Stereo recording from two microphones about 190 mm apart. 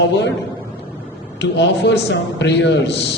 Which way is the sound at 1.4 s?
65° left (ahead or behind).